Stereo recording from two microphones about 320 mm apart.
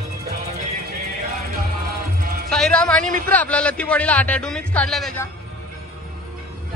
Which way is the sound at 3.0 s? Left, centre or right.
Right.